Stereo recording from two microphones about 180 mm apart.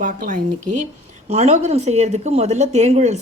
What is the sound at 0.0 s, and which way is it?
Speech, 45° right (ahead or behind).